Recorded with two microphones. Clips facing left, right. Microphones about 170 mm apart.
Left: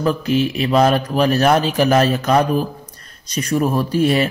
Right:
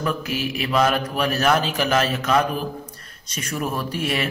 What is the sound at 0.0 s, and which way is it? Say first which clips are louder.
A man's voice: left 8 dB; 30° left (ahead or behind).